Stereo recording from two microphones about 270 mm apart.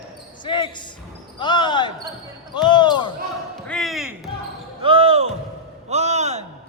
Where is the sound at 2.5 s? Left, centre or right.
Centre.